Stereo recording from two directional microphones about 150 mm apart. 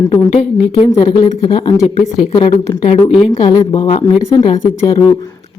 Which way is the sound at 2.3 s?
30° left (ahead or behind).